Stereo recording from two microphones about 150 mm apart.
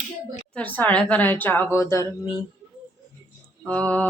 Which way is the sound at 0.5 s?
10° left (ahead or behind).